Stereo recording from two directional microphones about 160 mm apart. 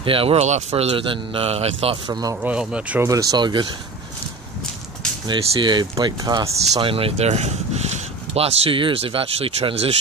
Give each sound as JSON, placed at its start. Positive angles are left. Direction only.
{"t": 0.0, "sound": "speech", "side_deg": -35}
{"t": 2.4, "sound": "speech", "side_deg": -5}
{"t": 3.1, "sound": "speech", "side_deg": -20}
{"t": 5.2, "sound": "speech", "side_deg": -30}
{"t": 6.9, "sound": "speech", "side_deg": -35}